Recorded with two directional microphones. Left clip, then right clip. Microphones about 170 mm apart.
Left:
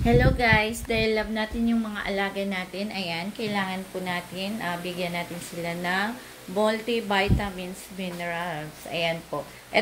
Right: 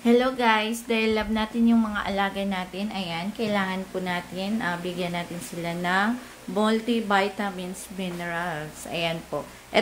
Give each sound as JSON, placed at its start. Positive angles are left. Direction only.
{"t": 0.0, "sound": "a woman's voice", "side_deg": -25}